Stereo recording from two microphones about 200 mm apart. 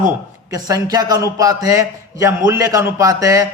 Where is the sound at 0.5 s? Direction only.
20° right (ahead or behind).